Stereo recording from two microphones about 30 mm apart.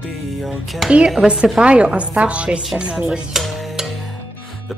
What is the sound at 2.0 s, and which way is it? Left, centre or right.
Dishes, right.